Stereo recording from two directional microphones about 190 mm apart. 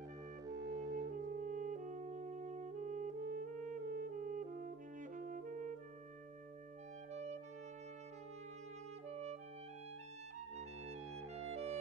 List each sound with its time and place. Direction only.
0.5 s music: 20° right (ahead or behind)
0.9 s music: 45° right (ahead or behind)
11.5 s music: 35° right (ahead or behind)